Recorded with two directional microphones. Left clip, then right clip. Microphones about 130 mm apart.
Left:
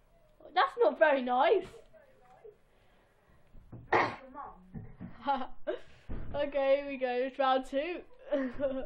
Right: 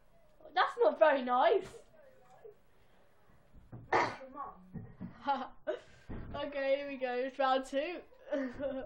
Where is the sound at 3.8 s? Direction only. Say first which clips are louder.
Left 3 dB; 55° left (ahead or behind).